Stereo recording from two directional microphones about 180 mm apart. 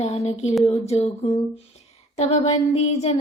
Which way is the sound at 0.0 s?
35° left (ahead or behind).